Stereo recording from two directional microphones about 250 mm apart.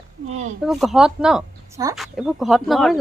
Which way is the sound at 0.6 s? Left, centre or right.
Centre.